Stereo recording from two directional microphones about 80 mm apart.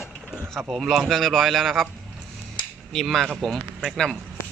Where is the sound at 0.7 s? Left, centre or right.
Centre.